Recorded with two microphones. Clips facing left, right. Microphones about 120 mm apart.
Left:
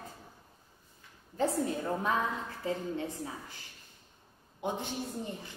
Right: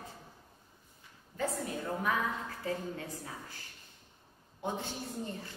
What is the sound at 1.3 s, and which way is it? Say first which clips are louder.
A woman's voice: left 5 dB; 30° left (ahead or behind).